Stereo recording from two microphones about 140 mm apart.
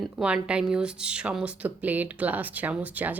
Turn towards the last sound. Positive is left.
turn(degrees=-10)  # may be behind; listen again after turning